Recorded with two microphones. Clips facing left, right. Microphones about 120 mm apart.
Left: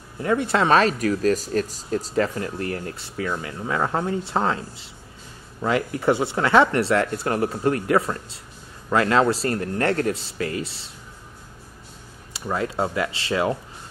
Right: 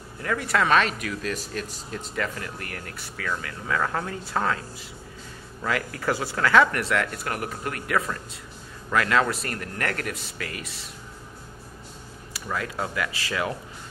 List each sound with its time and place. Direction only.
0.2 s speech: 25° left (ahead or behind)
12.3 s speech: 25° left (ahead or behind)